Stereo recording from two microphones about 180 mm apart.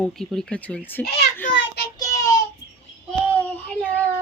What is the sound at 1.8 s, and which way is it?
Child singing, 65° left (ahead or behind).